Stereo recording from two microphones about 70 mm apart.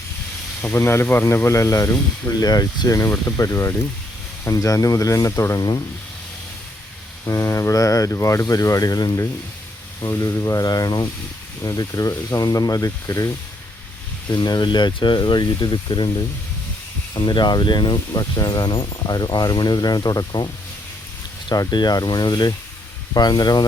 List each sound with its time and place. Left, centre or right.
0.9 s speech: left
2.5 s speech: left
3.1 s speech: left
5.5 s speech: left
7.3 s speech: left
10.0 s speech: left
12.1 s speech: left
12.5 s speech: left
14.3 s speech: left
17.2 s speech: left
21.5 s speech: left